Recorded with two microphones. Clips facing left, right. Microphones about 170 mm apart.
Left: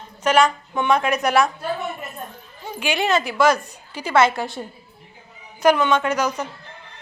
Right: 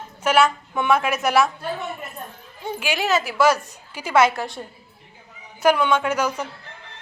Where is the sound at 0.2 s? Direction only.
5° right (ahead or behind).